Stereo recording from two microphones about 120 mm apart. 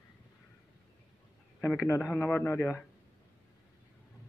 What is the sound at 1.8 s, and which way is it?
Speech, 15° left (ahead or behind).